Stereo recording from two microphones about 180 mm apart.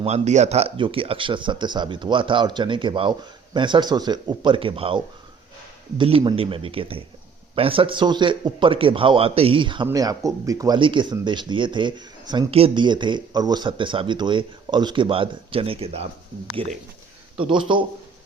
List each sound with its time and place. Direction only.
0.0 s speech: 40° right (ahead or behind)
17.3 s speech: 30° right (ahead or behind)